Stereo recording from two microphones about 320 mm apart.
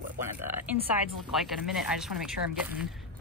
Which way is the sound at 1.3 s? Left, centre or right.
Centre.